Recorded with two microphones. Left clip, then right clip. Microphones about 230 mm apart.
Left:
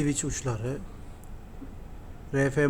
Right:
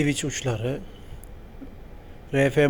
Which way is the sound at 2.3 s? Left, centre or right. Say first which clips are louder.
Right 5 dB; centre.